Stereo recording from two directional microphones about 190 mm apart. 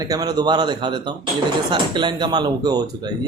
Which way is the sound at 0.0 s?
20° right (ahead or behind).